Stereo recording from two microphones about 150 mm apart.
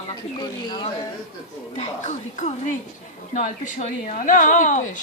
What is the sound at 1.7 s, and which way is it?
A woman's voice, 50° left (ahead or behind).